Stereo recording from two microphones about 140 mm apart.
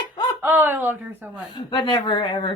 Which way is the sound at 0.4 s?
15° right (ahead or behind).